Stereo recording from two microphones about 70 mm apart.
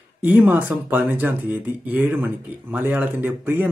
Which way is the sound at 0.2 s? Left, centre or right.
Right.